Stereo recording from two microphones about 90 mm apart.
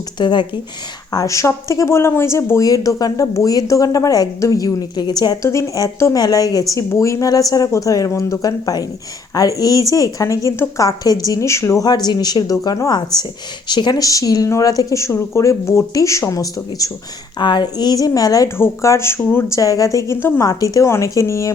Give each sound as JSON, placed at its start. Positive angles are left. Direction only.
{"t": 0.2, "sound": "speech", "side_deg": 55}
{"t": 1.1, "sound": "speech", "side_deg": 40}
{"t": 5.4, "sound": "speech", "side_deg": 35}
{"t": 11.9, "sound": "speech", "side_deg": 50}
{"t": 17.3, "sound": "speech", "side_deg": 55}
{"t": 18.4, "sound": "speech", "side_deg": 30}
{"t": 20.4, "sound": "speech", "side_deg": 40}